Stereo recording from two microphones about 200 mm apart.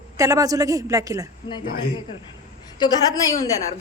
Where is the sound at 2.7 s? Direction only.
20° left (ahead or behind).